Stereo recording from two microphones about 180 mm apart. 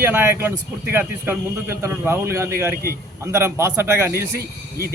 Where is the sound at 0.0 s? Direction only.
10° right (ahead or behind).